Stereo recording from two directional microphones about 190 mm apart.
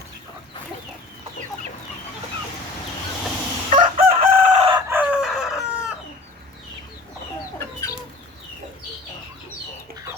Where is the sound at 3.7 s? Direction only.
40° right (ahead or behind).